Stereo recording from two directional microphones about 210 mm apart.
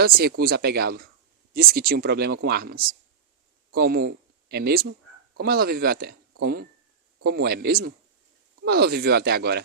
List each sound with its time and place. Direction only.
0.0 s speech: 50° right (ahead or behind)